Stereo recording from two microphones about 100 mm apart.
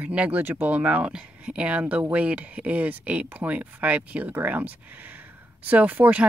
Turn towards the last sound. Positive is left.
turn(degrees=-15)  # may be behind; listen again after turning